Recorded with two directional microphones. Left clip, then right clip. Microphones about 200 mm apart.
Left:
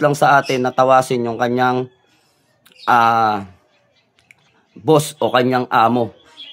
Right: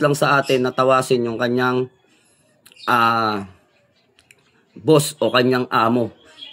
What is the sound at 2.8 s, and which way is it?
Speech, 15° left (ahead or behind).